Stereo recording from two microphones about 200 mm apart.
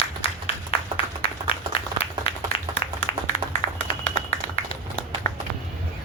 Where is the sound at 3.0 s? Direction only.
30° left (ahead or behind).